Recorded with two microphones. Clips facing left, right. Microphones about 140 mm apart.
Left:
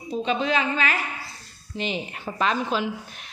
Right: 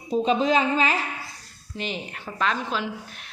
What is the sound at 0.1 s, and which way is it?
Speech, 40° right (ahead or behind).